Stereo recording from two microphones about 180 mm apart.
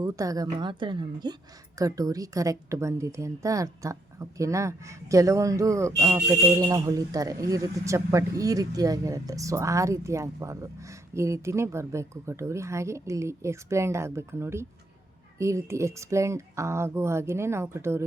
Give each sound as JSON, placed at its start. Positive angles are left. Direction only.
{"t": 0.0, "sound": "a woman's voice", "side_deg": -20}